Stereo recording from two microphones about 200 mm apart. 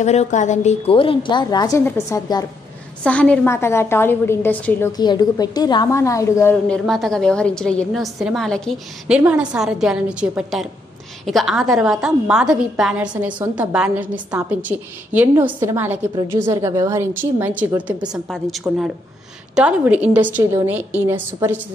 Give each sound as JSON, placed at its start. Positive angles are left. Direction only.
{"t": 0.0, "sound": "a woman's voice", "side_deg": 35}
{"t": 3.0, "sound": "a woman's voice", "side_deg": 5}
{"t": 6.9, "sound": "a woman's voice", "side_deg": 0}